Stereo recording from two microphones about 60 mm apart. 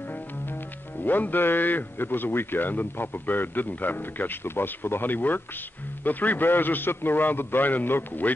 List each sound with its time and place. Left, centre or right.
1.0 s a man's voice: left